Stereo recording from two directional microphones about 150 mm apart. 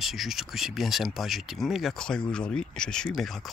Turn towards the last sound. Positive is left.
turn(degrees=0)  # may be behind; listen again after turning